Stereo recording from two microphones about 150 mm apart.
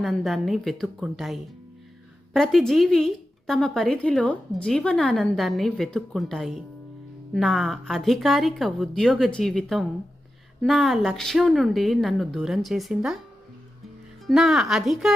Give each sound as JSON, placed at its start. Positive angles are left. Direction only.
{"t": 0.0, "sound": "a woman's voice", "side_deg": 0}
{"t": 14.3, "sound": "a woman's voice", "side_deg": 0}